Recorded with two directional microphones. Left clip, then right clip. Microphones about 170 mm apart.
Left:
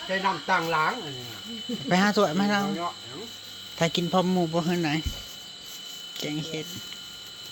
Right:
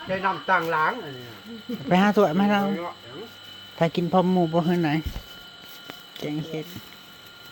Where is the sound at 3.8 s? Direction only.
25° right (ahead or behind).